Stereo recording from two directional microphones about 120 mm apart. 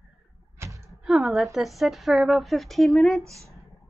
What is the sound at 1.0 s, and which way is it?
A woman's voice, centre (ahead or behind).